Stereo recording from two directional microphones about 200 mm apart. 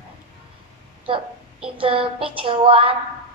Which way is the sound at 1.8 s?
25° right (ahead or behind).